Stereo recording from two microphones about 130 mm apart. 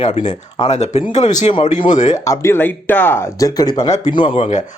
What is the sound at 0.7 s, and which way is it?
Speech, 60° left (ahead or behind).